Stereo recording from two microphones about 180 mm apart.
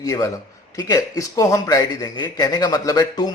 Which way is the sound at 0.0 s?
15° left (ahead or behind).